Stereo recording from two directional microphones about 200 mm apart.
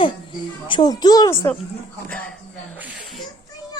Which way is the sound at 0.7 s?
20° left (ahead or behind).